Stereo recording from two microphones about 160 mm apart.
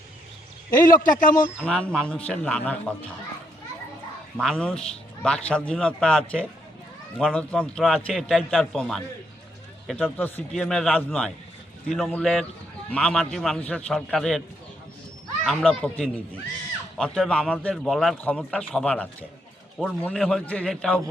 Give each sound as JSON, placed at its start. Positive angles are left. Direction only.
{"t": 0.7, "sound": "a man's voice", "side_deg": 55}
{"t": 1.6, "sound": "speech", "side_deg": 5}
{"t": 4.4, "sound": "a man's voice", "side_deg": 5}
{"t": 10.2, "sound": "a man's voice", "side_deg": 10}
{"t": 15.4, "sound": "a man's voice", "side_deg": 5}